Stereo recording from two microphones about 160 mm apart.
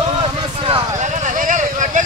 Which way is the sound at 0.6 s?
35° right (ahead or behind).